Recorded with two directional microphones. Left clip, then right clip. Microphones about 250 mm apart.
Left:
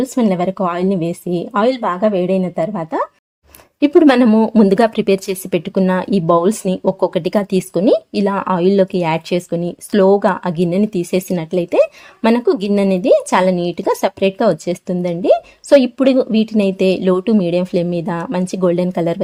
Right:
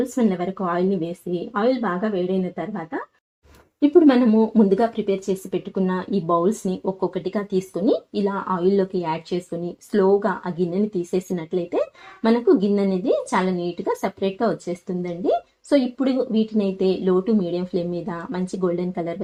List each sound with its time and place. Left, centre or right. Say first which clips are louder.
0.2 s speech: left 7 dB; left
3.8 s speech: left 5 dB; left